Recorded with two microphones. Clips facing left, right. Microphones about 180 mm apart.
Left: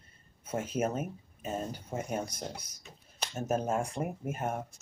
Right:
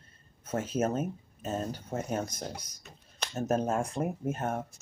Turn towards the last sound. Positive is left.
turn(degrees=10)  # may be behind; listen again after turning